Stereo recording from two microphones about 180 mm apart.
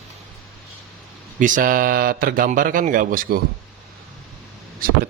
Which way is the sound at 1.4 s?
50° right (ahead or behind).